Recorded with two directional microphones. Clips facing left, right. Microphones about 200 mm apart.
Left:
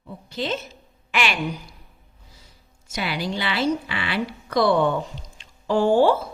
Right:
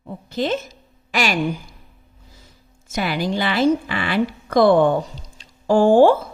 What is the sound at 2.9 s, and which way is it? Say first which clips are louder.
Speech: right 5 dB; 50° right (ahead or behind).